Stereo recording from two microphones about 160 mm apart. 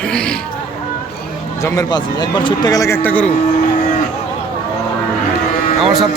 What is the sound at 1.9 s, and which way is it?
A man's voice, 25° left (ahead or behind).